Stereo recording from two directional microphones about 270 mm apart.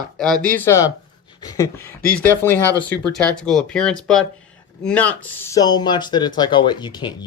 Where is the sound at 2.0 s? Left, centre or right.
Left.